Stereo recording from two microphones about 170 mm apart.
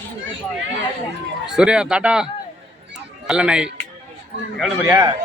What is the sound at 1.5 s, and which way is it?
Speech, 5° right (ahead or behind).